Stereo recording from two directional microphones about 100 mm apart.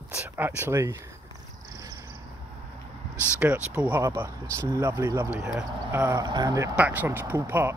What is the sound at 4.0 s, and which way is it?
Speech, 30° right (ahead or behind).